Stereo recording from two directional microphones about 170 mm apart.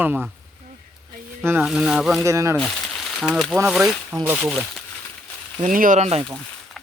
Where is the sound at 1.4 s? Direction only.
10° right (ahead or behind).